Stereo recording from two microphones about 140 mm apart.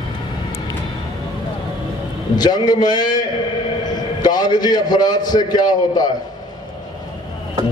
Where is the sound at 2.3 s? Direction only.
30° left (ahead or behind).